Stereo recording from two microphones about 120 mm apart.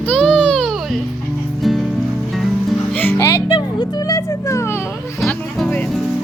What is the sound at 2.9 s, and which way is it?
Music, 15° left (ahead or behind).